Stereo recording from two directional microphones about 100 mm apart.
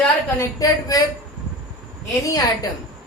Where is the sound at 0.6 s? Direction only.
40° left (ahead or behind).